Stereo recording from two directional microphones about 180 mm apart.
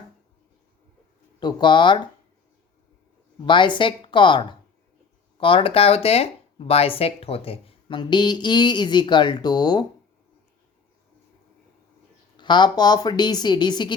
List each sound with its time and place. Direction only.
1.4 s speech: 25° left (ahead or behind)
3.4 s speech: 25° left (ahead or behind)
12.4 s speech: 25° left (ahead or behind)